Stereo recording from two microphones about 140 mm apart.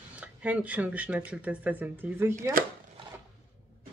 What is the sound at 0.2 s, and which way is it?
Speech, 10° right (ahead or behind).